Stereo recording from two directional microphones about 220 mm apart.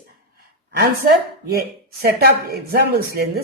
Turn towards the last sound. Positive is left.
turn(degrees=-45)  # may be behind; listen again after turning